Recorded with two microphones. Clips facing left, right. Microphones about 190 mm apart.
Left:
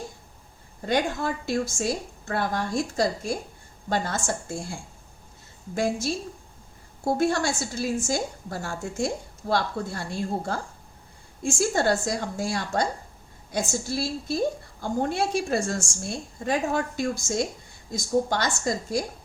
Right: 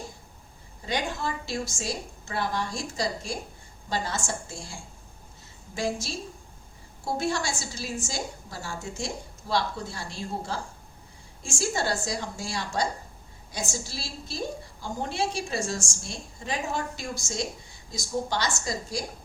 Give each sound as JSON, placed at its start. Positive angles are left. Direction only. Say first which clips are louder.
{"t": 0.9, "sound": "a woman's voice", "louder": "left 5 dB", "side_deg": 50}
{"t": 5.7, "sound": "a woman's voice", "louder": "left 4 dB", "side_deg": 55}